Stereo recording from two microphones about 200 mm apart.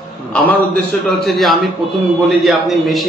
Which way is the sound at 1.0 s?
Centre (ahead or behind).